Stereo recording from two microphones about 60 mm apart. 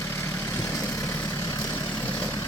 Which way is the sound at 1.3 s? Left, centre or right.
Left.